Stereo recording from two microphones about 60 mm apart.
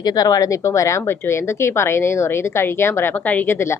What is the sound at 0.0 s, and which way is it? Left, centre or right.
Speech, left.